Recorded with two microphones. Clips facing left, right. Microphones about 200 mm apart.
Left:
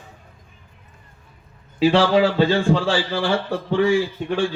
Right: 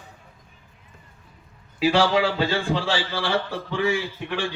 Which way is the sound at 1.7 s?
30° left (ahead or behind).